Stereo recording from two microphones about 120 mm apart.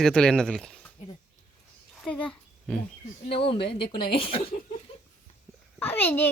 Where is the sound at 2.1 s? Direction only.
10° left (ahead or behind).